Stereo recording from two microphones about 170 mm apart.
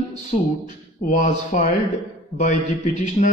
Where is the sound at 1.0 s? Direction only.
45° left (ahead or behind).